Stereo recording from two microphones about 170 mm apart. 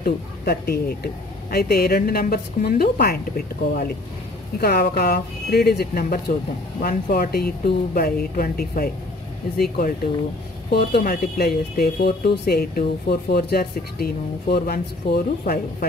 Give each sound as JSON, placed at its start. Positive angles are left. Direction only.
{"t": 0.0, "sound": "speech", "side_deg": 65}
{"t": 6.8, "sound": "speech", "side_deg": 55}